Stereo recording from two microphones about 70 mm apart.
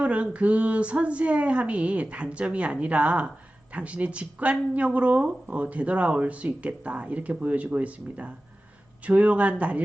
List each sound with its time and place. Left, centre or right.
0.0 s speech: centre